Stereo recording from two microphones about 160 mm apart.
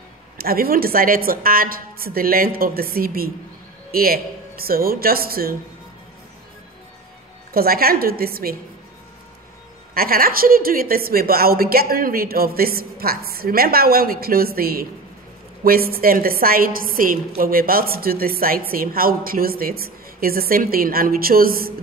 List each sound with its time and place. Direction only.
0.4 s a woman's voice: 70° right (ahead or behind)
7.5 s a woman's voice: 70° right (ahead or behind)
9.9 s a woman's voice: 65° right (ahead or behind)